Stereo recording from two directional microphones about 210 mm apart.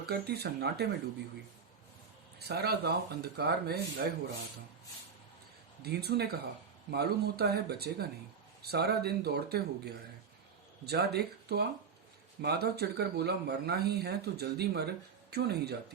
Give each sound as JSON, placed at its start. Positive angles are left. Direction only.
{"t": 0.0, "sound": "speech", "side_deg": -50}
{"t": 2.5, "sound": "speech", "side_deg": -50}
{"t": 5.8, "sound": "speech", "side_deg": -50}